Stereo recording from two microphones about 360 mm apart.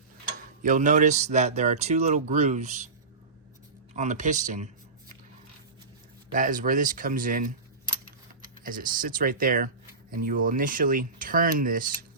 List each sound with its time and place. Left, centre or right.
0.6 s speech: right
3.9 s speech: centre
6.3 s speech: right
8.6 s speech: right